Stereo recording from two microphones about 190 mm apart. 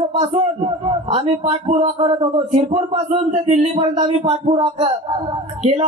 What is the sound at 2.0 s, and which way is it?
Speech, 25° right (ahead or behind).